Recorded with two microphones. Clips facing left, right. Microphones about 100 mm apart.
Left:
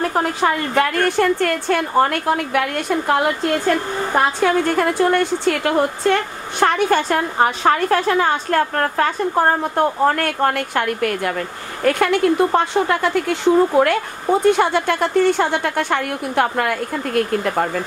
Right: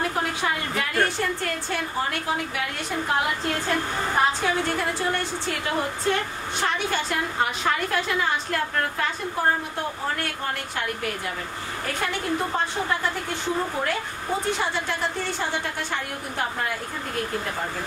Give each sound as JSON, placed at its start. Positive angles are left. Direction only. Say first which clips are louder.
{"t": 0.1, "sound": "a woman's voice", "louder": "left 8 dB", "side_deg": 45}
{"t": 6.6, "sound": "a woman's voice", "louder": "left 10 dB", "side_deg": 55}
{"t": 14.6, "sound": "a woman's voice", "louder": "left 9 dB", "side_deg": 65}